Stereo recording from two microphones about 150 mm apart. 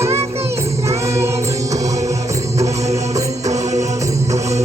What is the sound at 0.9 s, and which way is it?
Choir, 20° right (ahead or behind).